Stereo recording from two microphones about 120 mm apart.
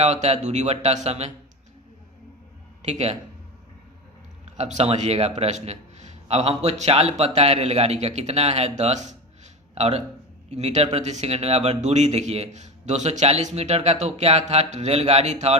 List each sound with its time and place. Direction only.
0.0 s a man's voice: 65° right (ahead or behind)
2.8 s a man's voice: 65° right (ahead or behind)
4.5 s a man's voice: 65° right (ahead or behind)
6.2 s a man's voice: 60° right (ahead or behind)
8.8 s a man's voice: 75° right (ahead or behind)
9.7 s a man's voice: 60° right (ahead or behind)